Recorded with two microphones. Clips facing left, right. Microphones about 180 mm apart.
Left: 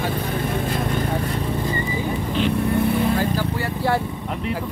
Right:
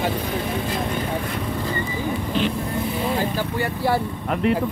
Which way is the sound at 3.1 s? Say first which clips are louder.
Left 1 dB; 20° right (ahead or behind).